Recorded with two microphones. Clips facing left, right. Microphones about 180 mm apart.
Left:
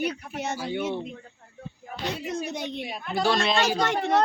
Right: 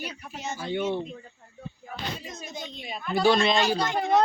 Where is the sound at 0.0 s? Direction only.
65° left (ahead or behind).